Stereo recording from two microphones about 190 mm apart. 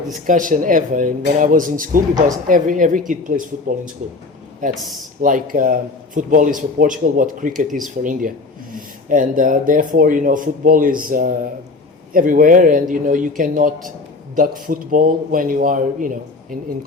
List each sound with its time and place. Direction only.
0.1 s speech: 45° right (ahead or behind)
4.7 s speech: centre (ahead or behind)
5.2 s speech: 45° right (ahead or behind)